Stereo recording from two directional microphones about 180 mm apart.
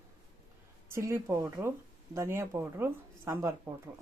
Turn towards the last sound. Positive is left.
turn(degrees=-15)  # may be behind; listen again after turning